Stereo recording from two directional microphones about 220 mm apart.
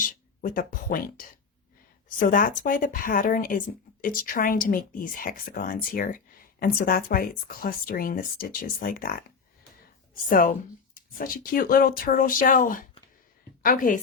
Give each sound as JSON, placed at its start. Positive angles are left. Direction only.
{"t": 0.0, "sound": "speech", "side_deg": 35}
{"t": 10.2, "sound": "a woman's voice", "side_deg": 40}